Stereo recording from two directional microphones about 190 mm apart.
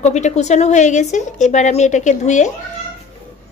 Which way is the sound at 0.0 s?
40° left (ahead or behind).